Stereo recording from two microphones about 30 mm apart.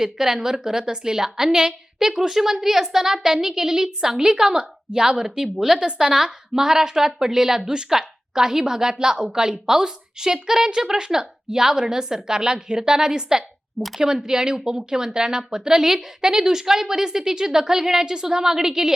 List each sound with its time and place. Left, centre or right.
0.0 s a woman's voice: centre